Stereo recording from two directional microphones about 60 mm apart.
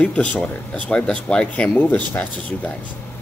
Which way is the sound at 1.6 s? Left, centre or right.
Left.